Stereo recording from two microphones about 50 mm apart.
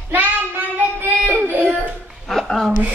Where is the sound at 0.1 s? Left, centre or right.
Right.